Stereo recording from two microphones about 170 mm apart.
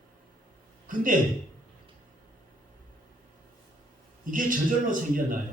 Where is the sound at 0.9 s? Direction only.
50° right (ahead or behind).